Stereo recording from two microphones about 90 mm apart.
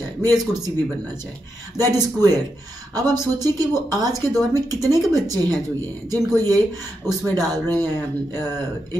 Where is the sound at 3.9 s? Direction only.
45° right (ahead or behind).